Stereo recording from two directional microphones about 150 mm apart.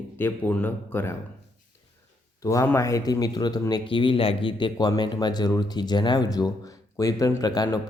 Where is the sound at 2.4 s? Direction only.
20° left (ahead or behind).